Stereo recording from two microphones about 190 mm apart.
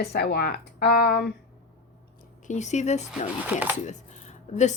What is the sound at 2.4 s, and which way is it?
Speech, 40° left (ahead or behind).